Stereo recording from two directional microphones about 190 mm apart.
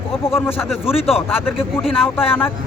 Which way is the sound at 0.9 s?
30° left (ahead or behind).